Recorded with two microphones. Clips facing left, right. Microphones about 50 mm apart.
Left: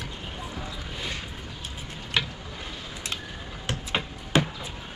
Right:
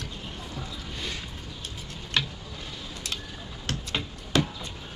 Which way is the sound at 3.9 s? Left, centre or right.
Left.